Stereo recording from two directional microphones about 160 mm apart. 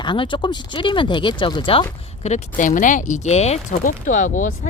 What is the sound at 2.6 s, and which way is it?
Speech, 50° left (ahead or behind).